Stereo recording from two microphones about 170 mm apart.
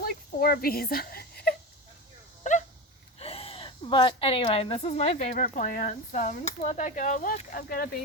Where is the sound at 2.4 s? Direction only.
45° left (ahead or behind).